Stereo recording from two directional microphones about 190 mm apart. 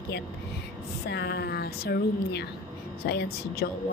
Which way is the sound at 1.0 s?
60° left (ahead or behind).